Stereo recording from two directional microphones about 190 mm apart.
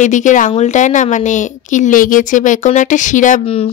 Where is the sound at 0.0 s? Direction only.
40° left (ahead or behind).